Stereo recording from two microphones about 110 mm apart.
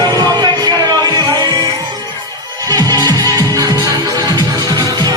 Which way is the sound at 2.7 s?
35° right (ahead or behind).